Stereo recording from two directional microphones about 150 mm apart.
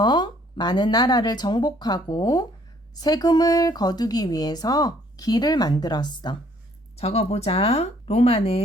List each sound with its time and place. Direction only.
0.0 s speech: 30° left (ahead or behind)
6.9 s speech: 45° left (ahead or behind)